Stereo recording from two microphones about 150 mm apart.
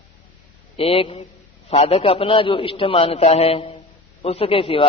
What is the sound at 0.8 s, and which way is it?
A man's voice, 40° left (ahead or behind).